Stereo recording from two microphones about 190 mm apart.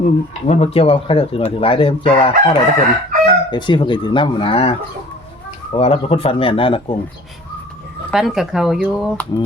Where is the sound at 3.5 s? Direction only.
25° left (ahead or behind).